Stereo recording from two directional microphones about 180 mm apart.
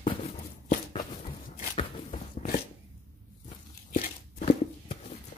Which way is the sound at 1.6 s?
40° left (ahead or behind).